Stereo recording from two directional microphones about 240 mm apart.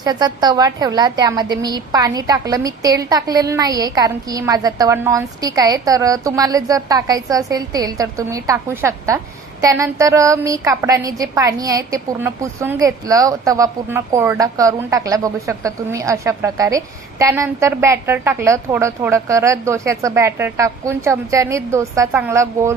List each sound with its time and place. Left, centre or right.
0.0 s a woman's voice: centre